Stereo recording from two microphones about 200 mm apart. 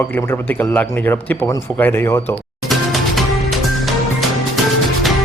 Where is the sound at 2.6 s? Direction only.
Centre (ahead or behind).